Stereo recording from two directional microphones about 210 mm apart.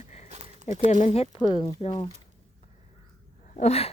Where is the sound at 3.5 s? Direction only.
30° left (ahead or behind).